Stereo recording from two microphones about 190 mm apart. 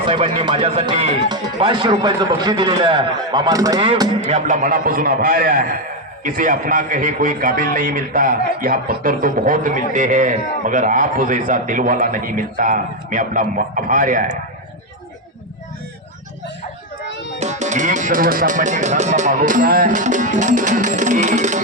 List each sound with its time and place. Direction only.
0.1 s speech: 30° right (ahead or behind)
4.3 s a man's voice: 40° right (ahead or behind)
17.4 s speech: 40° right (ahead or behind)